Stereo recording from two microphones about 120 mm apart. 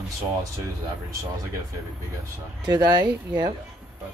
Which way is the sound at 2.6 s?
35° right (ahead or behind).